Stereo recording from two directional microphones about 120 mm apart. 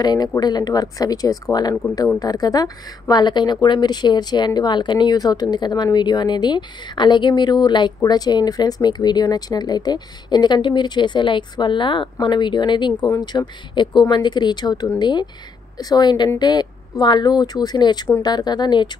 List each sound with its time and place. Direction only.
0.0 s a woman's voice: 35° left (ahead or behind)